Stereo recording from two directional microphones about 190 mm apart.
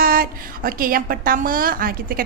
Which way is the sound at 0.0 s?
50° right (ahead or behind).